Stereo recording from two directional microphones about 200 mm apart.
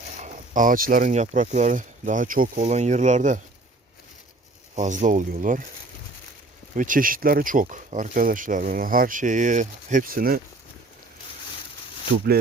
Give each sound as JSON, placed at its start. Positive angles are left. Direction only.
{"t": 0.5, "sound": "speech", "side_deg": -40}
{"t": 4.7, "sound": "speech", "side_deg": -40}
{"t": 6.7, "sound": "speech", "side_deg": -40}